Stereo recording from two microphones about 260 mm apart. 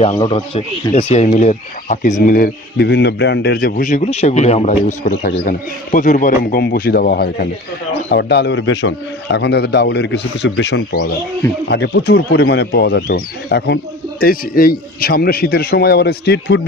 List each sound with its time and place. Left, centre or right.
0.0 s a man's voice: left